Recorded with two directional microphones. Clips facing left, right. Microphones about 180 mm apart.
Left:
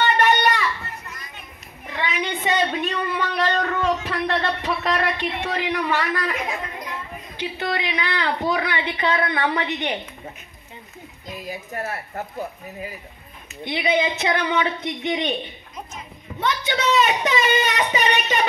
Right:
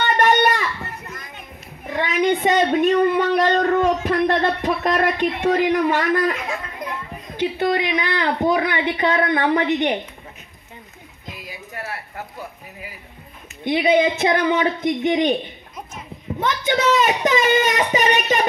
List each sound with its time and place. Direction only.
0.2 s a sound: 45° right (ahead or behind)
1.9 s speech: 45° right (ahead or behind)
7.3 s speech: 45° right (ahead or behind)
11.4 s a woman's voice: 45° left (ahead or behind)
13.7 s speech: 45° right (ahead or behind)
16.3 s speech: 45° right (ahead or behind)